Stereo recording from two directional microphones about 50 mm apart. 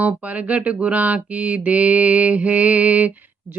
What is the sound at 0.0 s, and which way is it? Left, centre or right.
Mantra, right.